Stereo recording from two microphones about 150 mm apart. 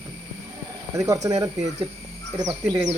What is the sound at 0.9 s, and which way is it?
Speech, 20° right (ahead or behind).